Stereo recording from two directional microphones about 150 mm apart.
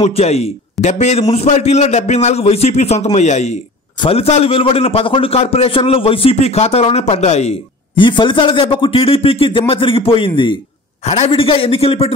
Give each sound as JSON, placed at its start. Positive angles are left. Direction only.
{"t": 0.0, "sound": "a man's voice", "side_deg": 45}
{"t": 7.9, "sound": "a man's voice", "side_deg": 30}